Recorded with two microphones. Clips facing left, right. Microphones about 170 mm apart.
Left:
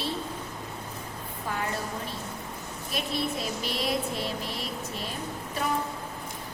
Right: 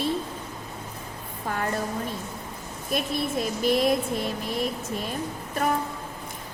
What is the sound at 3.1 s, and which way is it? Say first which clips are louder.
Vehicle: right 3 dB; 50° right (ahead or behind).